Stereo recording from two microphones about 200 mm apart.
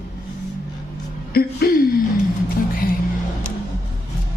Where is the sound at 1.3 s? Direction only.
50° left (ahead or behind).